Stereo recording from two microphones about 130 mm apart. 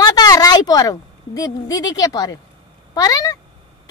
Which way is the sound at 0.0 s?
30° left (ahead or behind).